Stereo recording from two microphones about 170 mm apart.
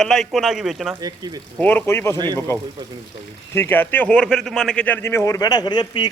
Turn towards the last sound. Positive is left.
turn(degrees=25)  # may be behind; listen again after turning